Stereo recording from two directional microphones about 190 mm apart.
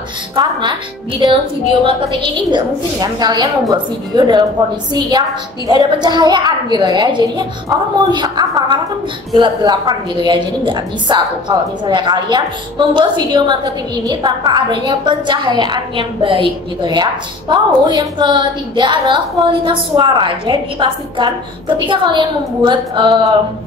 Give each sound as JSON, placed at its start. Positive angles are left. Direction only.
{"t": 0.4, "sound": "a woman's voice", "side_deg": -25}
{"t": 5.7, "sound": "a woman's voice", "side_deg": -20}